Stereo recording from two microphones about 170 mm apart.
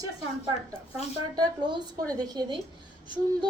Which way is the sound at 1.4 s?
25° right (ahead or behind).